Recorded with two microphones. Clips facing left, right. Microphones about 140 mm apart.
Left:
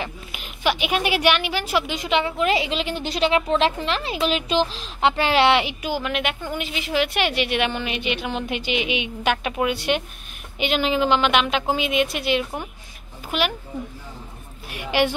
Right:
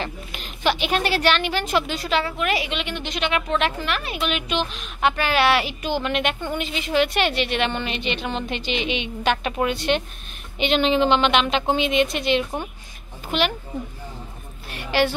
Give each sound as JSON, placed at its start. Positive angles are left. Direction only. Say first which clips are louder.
{"t": 0.0, "sound": "a woman's voice", "louder": "right 1 dB", "side_deg": 10}
{"t": 5.8, "sound": "a woman's voice", "louder": "right 2 dB", "side_deg": 5}
{"t": 14.7, "sound": "a woman's voice", "louder": "even", "side_deg": 15}